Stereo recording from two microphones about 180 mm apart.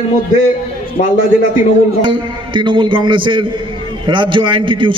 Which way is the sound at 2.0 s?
25° right (ahead or behind).